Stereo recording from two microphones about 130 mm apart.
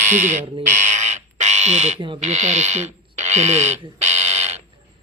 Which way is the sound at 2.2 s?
60° right (ahead or behind).